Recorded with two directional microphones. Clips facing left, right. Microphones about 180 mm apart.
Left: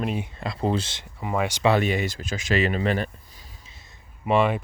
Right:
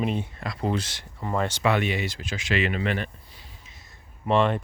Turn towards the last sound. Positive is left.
turn(degrees=10)  # may be behind; listen again after turning